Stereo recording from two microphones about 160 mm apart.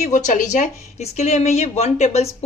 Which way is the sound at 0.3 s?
55° left (ahead or behind).